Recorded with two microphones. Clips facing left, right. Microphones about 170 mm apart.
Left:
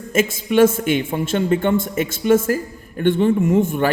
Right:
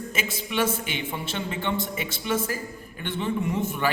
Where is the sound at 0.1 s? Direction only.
45° left (ahead or behind).